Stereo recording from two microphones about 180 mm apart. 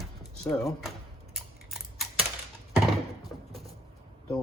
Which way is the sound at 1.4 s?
Centre (ahead or behind).